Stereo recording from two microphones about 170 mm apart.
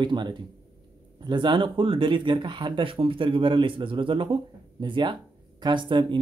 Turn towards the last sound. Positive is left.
turn(degrees=-30)  # may be behind; listen again after turning